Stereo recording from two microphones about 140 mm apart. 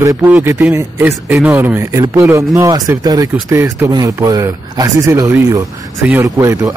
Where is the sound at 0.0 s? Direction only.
15° right (ahead or behind).